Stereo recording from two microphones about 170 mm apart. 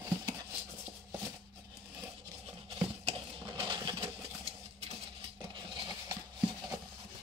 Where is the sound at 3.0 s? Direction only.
30° right (ahead or behind).